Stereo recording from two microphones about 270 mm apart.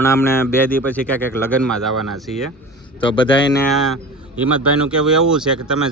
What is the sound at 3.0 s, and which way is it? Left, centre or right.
Speech, centre.